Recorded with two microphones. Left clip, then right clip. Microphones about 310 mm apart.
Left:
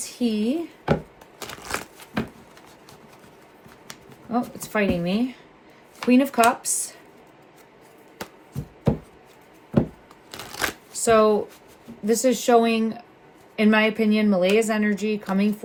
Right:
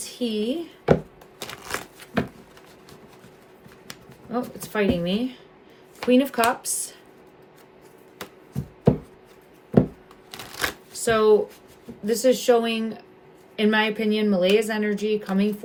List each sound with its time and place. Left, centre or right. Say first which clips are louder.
0.0 s speech: left 1 dB; centre
1.4 s a sound: left 1 dB; centre
4.3 s a woman's voice: left 2 dB; centre
10.3 s shuffling cards: left 1 dB; centre
11.0 s a woman's voice: even; centre